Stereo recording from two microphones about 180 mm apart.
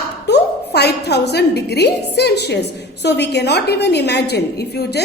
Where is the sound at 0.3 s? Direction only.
70° left (ahead or behind).